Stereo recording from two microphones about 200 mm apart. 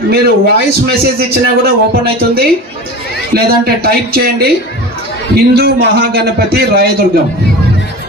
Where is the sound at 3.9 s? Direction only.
50° right (ahead or behind).